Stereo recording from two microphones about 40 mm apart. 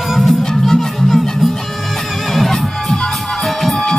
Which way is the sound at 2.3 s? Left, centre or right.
Centre.